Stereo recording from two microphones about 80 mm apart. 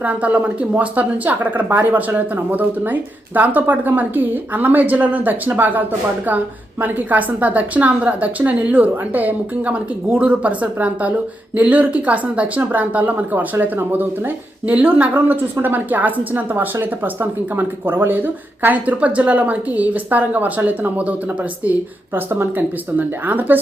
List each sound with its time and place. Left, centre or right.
0.0 s a woman's voice: centre
6.8 s a woman's voice: right